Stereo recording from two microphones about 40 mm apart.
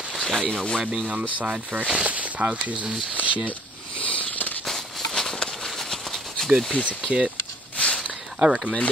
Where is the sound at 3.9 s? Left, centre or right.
Left.